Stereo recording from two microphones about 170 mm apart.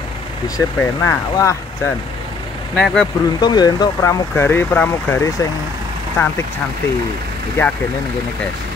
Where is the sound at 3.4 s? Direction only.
25° left (ahead or behind).